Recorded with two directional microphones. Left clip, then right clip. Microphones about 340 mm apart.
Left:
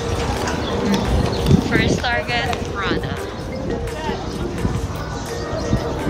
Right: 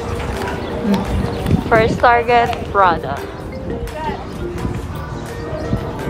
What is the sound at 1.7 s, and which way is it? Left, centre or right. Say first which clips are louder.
Speech: right 12 dB; centre.